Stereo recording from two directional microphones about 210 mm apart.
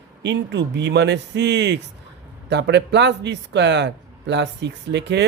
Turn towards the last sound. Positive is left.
turn(degrees=-55)  # may be behind; listen again after turning